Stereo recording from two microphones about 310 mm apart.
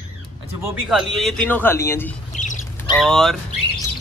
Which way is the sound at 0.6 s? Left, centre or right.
Centre.